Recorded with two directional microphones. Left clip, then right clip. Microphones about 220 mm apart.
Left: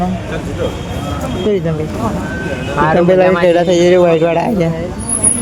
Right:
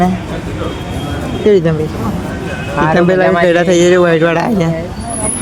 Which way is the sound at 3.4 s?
15° right (ahead or behind).